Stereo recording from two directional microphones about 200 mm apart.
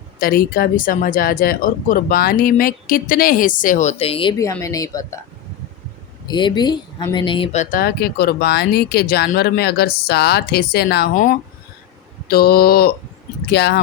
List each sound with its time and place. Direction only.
0.2 s speech: 45° left (ahead or behind); by 5.2 s 15° left (ahead or behind)
6.2 s speech: 20° left (ahead or behind); by 11.1 s 55° left (ahead or behind)
11.1 s speech: 40° left (ahead or behind)